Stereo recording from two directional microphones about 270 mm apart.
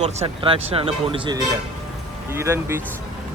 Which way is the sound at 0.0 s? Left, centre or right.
Right.